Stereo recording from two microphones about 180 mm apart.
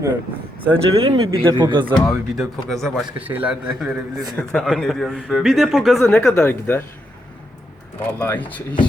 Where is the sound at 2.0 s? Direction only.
Centre (ahead or behind).